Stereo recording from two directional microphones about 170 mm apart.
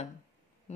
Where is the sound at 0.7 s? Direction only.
40° left (ahead or behind).